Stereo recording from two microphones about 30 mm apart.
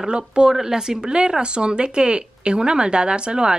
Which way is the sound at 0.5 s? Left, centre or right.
Centre.